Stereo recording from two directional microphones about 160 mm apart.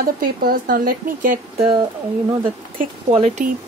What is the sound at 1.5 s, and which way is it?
Speech, 35° right (ahead or behind).